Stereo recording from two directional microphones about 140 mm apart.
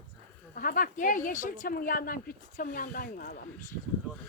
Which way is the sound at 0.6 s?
85° left.